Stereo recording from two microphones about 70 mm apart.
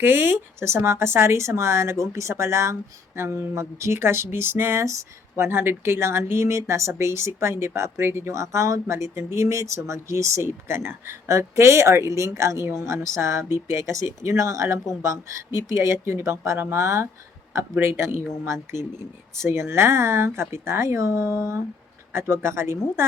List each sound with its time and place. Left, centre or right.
0.0 s speech: right